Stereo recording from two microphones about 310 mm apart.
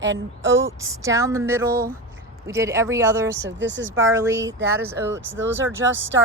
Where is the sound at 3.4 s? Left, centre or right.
Right.